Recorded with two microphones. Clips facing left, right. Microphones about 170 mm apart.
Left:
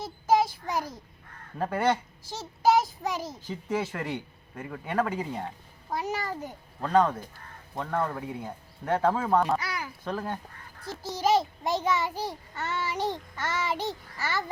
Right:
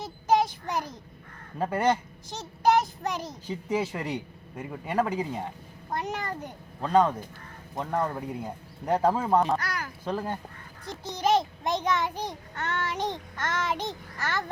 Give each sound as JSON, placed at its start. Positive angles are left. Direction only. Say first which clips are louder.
{"t": 0.0, "sound": "child singing", "louder": "even", "side_deg": 5}
{"t": 1.5, "sound": "speech", "louder": "right 1 dB", "side_deg": -10}
{"t": 2.6, "sound": "a child's voice", "louder": "even", "side_deg": 5}
{"t": 3.7, "sound": "speech", "louder": "right 1 dB", "side_deg": -10}
{"t": 5.9, "sound": "a child's voice", "louder": "left 1 dB", "side_deg": 5}
{"t": 6.8, "sound": "speech", "louder": "right 1 dB", "side_deg": -10}
{"t": 9.6, "sound": "speech", "louder": "right 1 dB", "side_deg": 10}
{"t": 10.1, "sound": "speech", "louder": "right 2 dB", "side_deg": -10}
{"t": 11.1, "sound": "a child's voice", "louder": "even", "side_deg": 5}